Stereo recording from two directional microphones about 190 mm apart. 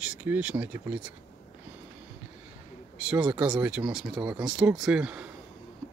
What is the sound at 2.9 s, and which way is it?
Speech, 5° right (ahead or behind).